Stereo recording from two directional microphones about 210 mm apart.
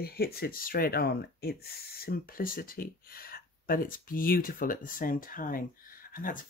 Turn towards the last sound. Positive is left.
turn(degrees=40)  # may be behind; listen again after turning